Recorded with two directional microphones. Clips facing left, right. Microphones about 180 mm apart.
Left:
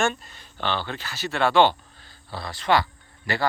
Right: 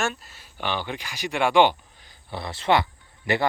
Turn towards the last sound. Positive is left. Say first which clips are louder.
# right 2 dB
turn(degrees=-20)  # may be behind; listen again after turning